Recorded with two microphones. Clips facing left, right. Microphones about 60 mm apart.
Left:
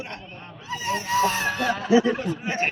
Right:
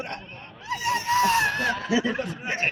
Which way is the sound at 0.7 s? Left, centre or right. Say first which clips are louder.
Right 1 dB; right.